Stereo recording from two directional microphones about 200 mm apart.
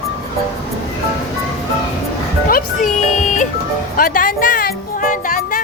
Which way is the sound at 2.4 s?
45° left (ahead or behind).